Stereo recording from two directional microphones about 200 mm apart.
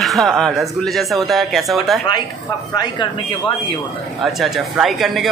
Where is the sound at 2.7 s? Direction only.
25° left (ahead or behind).